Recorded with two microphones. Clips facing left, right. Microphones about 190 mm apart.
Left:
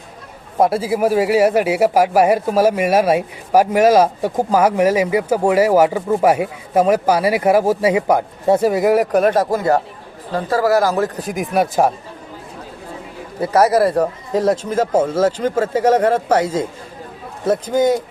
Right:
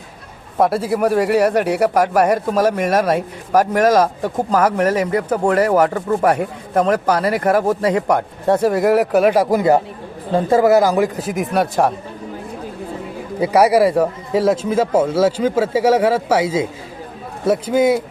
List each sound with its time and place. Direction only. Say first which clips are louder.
0.6 s speech: even; centre (ahead or behind)
11.3 s speech: even; centre (ahead or behind)
13.4 s speech: right 1 dB; 10° right (ahead or behind)